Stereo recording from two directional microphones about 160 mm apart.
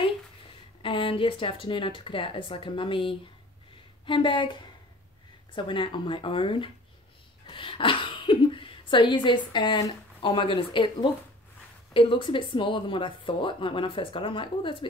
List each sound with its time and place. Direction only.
0.8 s speech: 35° left (ahead or behind)